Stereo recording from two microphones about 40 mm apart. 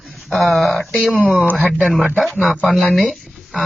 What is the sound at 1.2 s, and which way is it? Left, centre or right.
Speech, right.